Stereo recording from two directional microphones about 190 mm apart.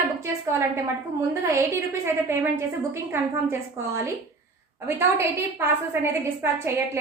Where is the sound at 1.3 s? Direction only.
15° right (ahead or behind).